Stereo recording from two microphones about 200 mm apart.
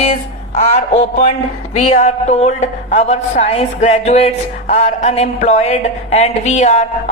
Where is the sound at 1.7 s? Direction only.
35° left (ahead or behind).